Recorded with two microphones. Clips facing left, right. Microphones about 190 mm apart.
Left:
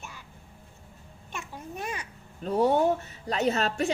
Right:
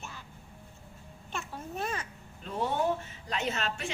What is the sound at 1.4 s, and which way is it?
Babbling, 15° left (ahead or behind).